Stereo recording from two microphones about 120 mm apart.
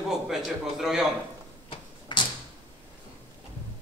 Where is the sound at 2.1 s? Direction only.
40° left (ahead or behind).